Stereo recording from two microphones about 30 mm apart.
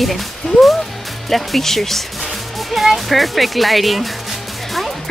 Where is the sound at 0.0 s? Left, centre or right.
Centre.